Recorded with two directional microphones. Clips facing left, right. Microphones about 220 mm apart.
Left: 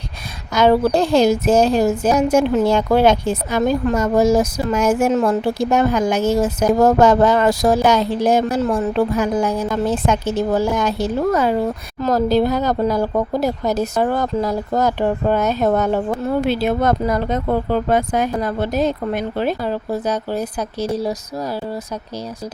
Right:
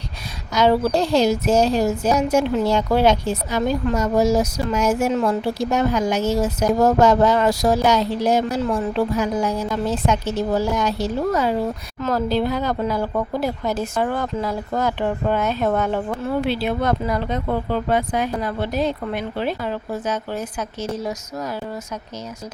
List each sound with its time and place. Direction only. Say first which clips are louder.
0.5 s a woman's voice: left 3 dB; 55° left (ahead or behind)
11.9 s speech: left 5 dB; 40° left (ahead or behind)